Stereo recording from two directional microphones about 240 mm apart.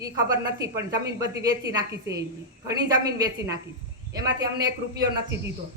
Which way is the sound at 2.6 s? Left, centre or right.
Centre.